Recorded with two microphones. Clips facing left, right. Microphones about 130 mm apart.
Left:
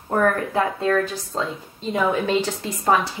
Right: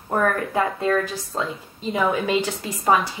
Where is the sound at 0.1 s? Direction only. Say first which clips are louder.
Left 1 dB; centre (ahead or behind).